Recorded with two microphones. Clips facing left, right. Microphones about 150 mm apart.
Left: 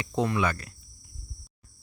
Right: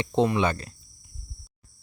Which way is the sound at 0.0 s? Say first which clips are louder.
Right 4 dB; 25° right (ahead or behind).